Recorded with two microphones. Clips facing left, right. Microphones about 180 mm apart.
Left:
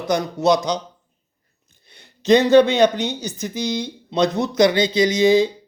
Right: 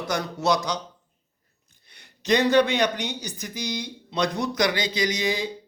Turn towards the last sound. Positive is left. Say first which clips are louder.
# left 11 dB
turn(degrees=25)  # may be behind; listen again after turning